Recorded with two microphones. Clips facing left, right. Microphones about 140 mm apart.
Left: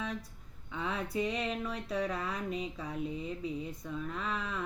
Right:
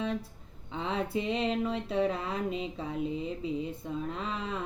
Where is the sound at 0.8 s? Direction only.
25° right (ahead or behind).